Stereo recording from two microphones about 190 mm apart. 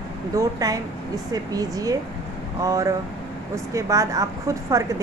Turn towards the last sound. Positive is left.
turn(degrees=-15)  # may be behind; listen again after turning